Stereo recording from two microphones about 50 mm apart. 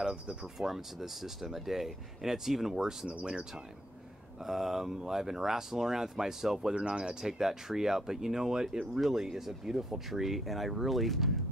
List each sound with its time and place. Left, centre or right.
0.0 s speech: centre
4.5 s speech: centre